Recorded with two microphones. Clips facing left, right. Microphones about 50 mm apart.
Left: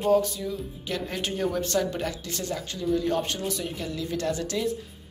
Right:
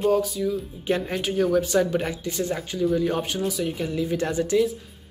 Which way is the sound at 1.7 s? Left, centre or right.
Centre.